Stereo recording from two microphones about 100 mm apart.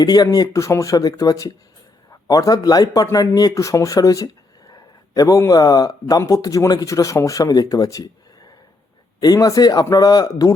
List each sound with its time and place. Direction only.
0.0 s speech: 40° left (ahead or behind)
9.2 s speech: 40° left (ahead or behind)